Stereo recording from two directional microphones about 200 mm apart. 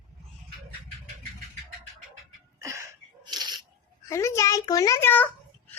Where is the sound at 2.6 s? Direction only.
15° right (ahead or behind).